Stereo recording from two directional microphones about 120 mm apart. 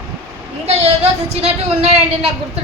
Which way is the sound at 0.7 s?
60° right (ahead or behind).